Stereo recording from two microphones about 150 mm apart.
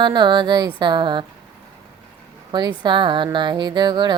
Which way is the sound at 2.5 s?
30° right (ahead or behind).